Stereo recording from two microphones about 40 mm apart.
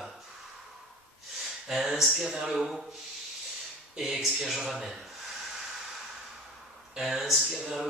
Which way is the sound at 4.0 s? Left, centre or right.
Centre.